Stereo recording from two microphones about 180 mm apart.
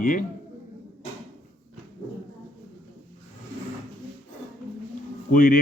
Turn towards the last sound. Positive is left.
turn(degrees=50)  # may be behind; listen again after turning